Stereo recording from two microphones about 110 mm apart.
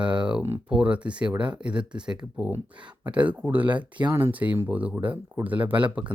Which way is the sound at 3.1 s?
10° right (ahead or behind).